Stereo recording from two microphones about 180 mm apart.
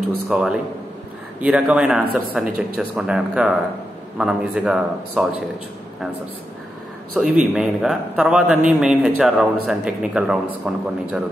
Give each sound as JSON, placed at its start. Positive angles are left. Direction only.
{"t": 0.3, "sound": "a man's voice", "side_deg": 0}
{"t": 7.2, "sound": "a man's voice", "side_deg": -5}